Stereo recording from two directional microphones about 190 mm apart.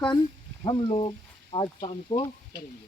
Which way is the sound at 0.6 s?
30° left (ahead or behind).